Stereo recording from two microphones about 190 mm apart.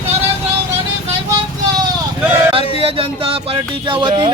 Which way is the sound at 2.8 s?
30° right (ahead or behind).